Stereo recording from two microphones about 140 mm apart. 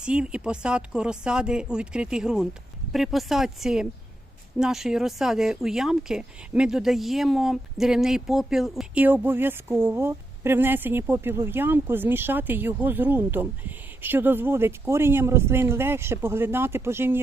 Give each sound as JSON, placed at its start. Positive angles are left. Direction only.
{"t": 0.0, "sound": "speech", "side_deg": -5}
{"t": 9.0, "sound": "speech", "side_deg": -15}